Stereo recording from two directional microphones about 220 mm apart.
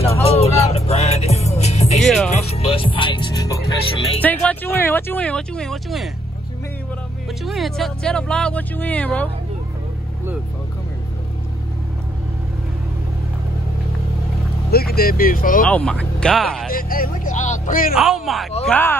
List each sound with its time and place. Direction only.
0.7 s music: 30° left (ahead or behind)
2.0 s music: centre (ahead or behind)
2.3 s music: 25° left (ahead or behind)
4.2 s a sound: 5° left (ahead or behind)
7.4 s speech: centre (ahead or behind)
14.7 s speech: 45° left (ahead or behind)
15.6 s speech: 5° left (ahead or behind)
16.7 s speech: 40° left (ahead or behind)
17.9 s speech: centre (ahead or behind)